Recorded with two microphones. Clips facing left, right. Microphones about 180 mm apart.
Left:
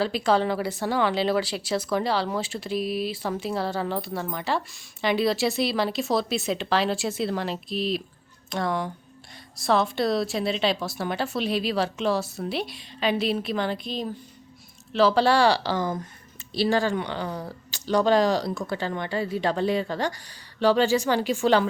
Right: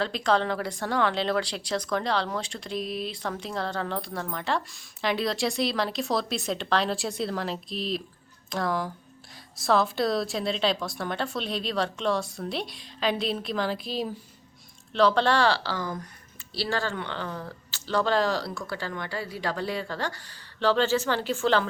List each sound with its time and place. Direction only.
0.0 s speech: 5° left (ahead or behind)
14.9 s speech: 5° left (ahead or behind)